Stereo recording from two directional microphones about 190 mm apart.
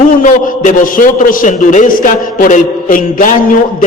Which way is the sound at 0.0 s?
45° left (ahead or behind).